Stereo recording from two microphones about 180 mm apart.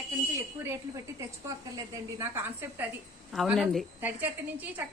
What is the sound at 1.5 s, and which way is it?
A woman's voice, 15° right (ahead or behind).